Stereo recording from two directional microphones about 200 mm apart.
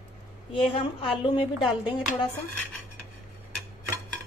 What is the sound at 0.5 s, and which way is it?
A woman's voice, 25° left (ahead or behind).